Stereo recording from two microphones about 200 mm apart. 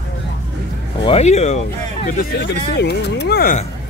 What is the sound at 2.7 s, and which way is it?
Speech, 55° left (ahead or behind).